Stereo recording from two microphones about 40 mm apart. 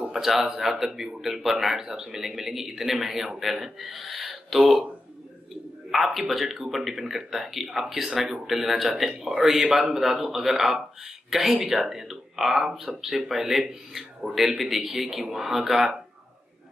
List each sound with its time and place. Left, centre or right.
0.1 s speech: centre
5.9 s a man's voice: centre
14.2 s a man's voice: right
15.0 s speech: centre